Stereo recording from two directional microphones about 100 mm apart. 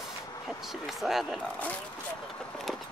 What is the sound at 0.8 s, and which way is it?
Speech, centre (ahead or behind).